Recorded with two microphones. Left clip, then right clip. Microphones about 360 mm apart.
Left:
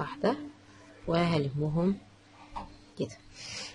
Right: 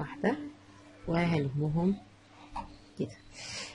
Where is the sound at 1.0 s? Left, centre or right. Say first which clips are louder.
Left 3 dB; left.